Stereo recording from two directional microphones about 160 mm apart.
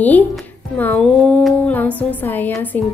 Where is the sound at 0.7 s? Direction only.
5° left (ahead or behind).